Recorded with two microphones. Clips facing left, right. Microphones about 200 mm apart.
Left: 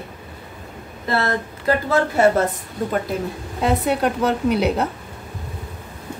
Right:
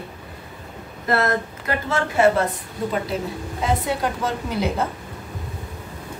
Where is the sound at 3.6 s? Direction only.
60° left (ahead or behind).